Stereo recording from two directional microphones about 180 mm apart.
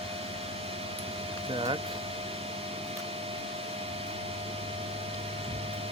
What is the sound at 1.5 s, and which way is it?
Speech, 30° right (ahead or behind).